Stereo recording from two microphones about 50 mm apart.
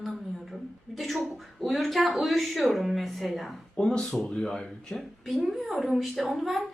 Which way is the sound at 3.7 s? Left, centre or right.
Centre.